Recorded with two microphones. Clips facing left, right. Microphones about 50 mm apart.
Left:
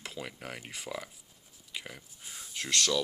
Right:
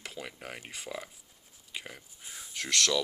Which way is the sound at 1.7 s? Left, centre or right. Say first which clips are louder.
Even; centre.